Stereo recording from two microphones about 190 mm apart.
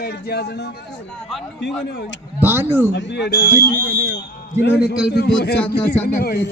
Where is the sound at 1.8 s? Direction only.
65° left (ahead or behind).